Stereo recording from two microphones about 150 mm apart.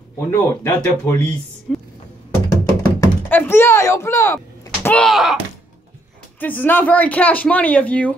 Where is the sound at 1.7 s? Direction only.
Centre (ahead or behind).